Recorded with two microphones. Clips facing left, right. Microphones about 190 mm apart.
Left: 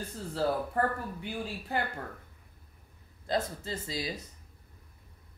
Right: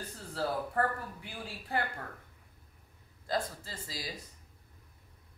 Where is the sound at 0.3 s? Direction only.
25° left (ahead or behind).